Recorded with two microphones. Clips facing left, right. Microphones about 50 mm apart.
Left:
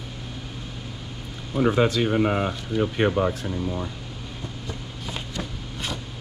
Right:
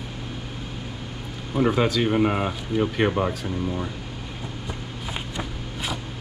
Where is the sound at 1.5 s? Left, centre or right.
Centre.